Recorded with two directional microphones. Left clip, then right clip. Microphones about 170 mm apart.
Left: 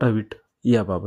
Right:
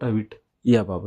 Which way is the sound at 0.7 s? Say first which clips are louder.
Even; centre (ahead or behind).